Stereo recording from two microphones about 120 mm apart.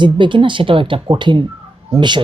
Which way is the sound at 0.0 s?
40° right (ahead or behind).